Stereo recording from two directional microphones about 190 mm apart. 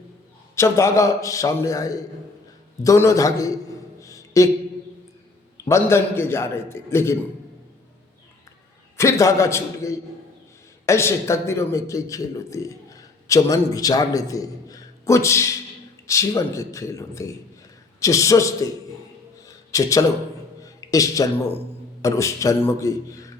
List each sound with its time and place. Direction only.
0.5 s a man's voice: 15° left (ahead or behind)
4.0 s a sound: 15° left (ahead or behind)
5.6 s a man's voice: 15° left (ahead or behind)
9.0 s a man's voice: 15° left (ahead or behind)
19.5 s a sound: 15° left (ahead or behind)
20.6 s a man's voice: 20° left (ahead or behind)